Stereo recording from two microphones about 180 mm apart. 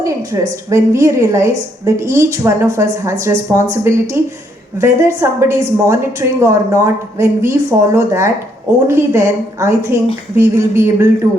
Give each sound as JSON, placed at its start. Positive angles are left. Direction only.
{"t": 0.7, "sound": "a woman's voice", "side_deg": -15}